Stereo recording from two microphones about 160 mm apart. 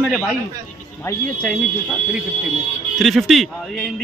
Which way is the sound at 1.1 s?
15° left (ahead or behind).